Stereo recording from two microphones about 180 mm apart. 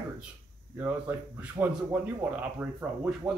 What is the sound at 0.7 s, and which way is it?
Speech, 10° right (ahead or behind).